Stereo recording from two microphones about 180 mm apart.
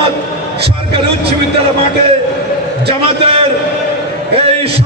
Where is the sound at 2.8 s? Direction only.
30° right (ahead or behind).